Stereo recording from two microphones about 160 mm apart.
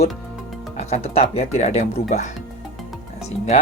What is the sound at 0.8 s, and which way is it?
Speech, 45° left (ahead or behind).